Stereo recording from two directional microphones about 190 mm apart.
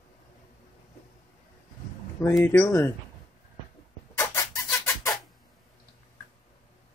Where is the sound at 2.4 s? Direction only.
10° left (ahead or behind).